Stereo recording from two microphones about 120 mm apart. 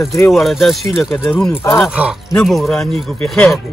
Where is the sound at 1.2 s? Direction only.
15° left (ahead or behind).